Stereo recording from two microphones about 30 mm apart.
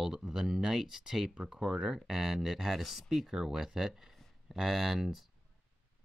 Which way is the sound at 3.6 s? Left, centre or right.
Centre.